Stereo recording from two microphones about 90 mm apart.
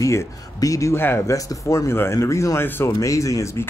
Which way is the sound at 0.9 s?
30° left (ahead or behind).